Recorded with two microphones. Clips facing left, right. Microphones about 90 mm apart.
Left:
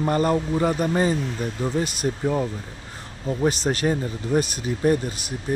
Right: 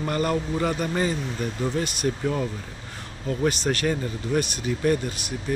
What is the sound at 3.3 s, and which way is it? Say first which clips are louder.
Speech: left 2 dB; 25° left (ahead or behind).